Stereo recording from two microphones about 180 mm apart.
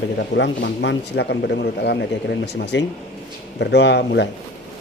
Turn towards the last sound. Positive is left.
turn(degrees=70)  # may be behind; listen again after turning